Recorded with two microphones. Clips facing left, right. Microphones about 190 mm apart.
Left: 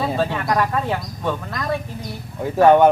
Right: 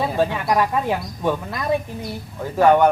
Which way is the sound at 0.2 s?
15° right (ahead or behind).